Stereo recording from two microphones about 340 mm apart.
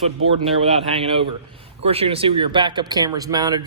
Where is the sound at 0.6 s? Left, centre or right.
Centre.